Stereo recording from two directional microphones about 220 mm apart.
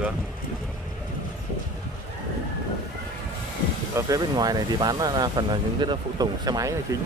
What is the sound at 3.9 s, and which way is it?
Speech, 15° right (ahead or behind).